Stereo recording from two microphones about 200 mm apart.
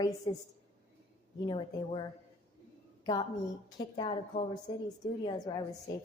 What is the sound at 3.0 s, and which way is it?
A woman's voice, 20° left (ahead or behind).